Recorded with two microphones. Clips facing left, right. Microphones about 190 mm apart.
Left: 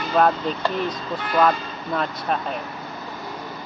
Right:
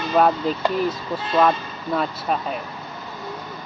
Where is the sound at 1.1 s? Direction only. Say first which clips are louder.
Even; 25° right (ahead or behind).